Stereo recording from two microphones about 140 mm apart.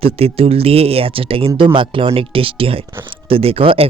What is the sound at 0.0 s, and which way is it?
Speech, 45° right (ahead or behind).